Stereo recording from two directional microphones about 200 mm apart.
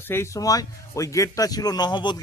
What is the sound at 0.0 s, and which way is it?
A man's voice, 10° left (ahead or behind).